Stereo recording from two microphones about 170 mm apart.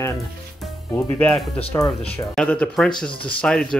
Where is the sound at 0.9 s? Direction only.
20° left (ahead or behind).